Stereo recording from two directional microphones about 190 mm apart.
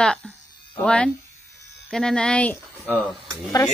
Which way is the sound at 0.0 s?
5° left (ahead or behind).